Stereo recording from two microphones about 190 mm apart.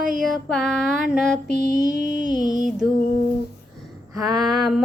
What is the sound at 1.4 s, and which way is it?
Child singing, 45° right (ahead or behind).